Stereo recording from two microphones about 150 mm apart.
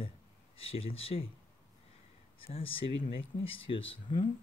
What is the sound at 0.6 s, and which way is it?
Speech, 40° left (ahead or behind).